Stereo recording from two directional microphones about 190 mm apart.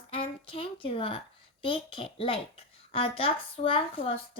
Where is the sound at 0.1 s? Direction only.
30° left (ahead or behind).